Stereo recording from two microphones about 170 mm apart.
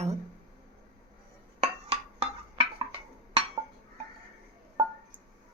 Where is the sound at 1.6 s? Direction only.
35° right (ahead or behind).